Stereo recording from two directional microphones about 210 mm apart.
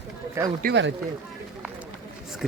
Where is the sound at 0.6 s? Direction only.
60° right (ahead or behind).